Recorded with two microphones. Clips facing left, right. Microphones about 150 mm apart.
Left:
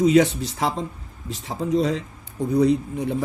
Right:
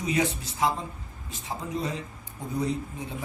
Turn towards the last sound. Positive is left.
turn(degrees=75)  # may be behind; listen again after turning